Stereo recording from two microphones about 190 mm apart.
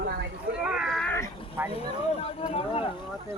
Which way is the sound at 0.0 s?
50° right (ahead or behind).